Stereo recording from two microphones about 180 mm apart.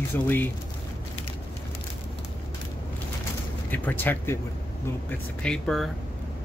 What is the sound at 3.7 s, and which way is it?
Speech, 10° left (ahead or behind).